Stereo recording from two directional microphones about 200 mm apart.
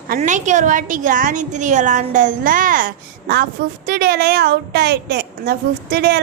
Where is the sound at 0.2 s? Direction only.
40° right (ahead or behind).